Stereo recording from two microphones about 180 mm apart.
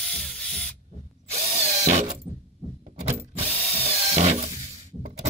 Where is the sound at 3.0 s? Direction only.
35° right (ahead or behind).